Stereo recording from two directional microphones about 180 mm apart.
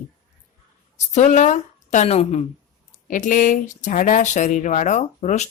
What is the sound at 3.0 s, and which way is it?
Speech, 45° left (ahead or behind).